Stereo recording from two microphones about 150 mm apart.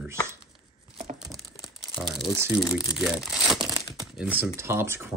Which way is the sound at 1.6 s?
Centre (ahead or behind).